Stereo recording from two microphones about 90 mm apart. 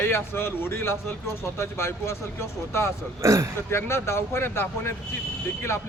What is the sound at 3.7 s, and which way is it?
A man's voice, 25° left (ahead or behind).